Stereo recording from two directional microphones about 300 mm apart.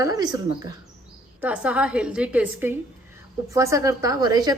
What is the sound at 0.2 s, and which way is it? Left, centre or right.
A woman's voice, centre.